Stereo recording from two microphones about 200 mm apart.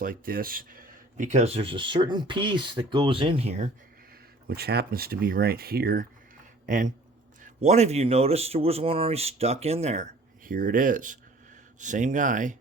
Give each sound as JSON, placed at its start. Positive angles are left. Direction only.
{"t": 0.0, "sound": "speech", "side_deg": -45}
{"t": 4.4, "sound": "speech", "side_deg": -50}
{"t": 6.7, "sound": "a man's voice", "side_deg": -40}